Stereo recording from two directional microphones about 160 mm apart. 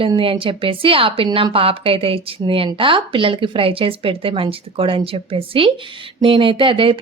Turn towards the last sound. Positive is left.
turn(degrees=-35)  # may be behind; listen again after turning